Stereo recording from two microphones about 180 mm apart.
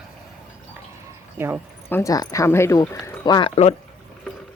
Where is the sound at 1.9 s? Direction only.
15° left (ahead or behind).